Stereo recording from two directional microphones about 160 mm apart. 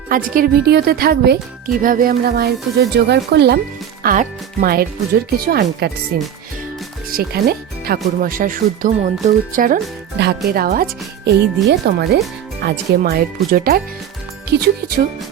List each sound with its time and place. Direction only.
0.1 s speech: 60° right (ahead or behind); by 3.6 s 90° right
4.0 s speech: 60° right (ahead or behind)
11.3 s speech: 90° right
12.6 s speech: 75° right (ahead or behind)